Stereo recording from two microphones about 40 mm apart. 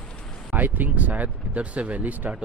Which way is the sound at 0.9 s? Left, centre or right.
Right.